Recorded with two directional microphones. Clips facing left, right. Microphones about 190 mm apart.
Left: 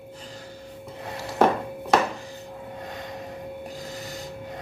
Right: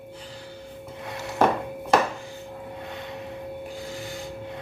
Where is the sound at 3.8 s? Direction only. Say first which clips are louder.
Right 1 dB; 40° left (ahead or behind).